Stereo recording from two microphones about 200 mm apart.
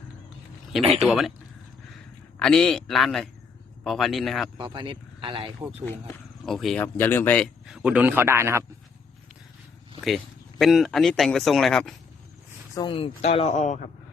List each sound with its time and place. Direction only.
0.8 s speech: 30° right (ahead or behind)
1.0 s speech: centre (ahead or behind)
2.4 s speech: 5° left (ahead or behind)
4.5 s speech: 25° right (ahead or behind)
6.4 s speech: centre (ahead or behind)
10.6 s speech: centre (ahead or behind)
12.7 s speech: 25° left (ahead or behind)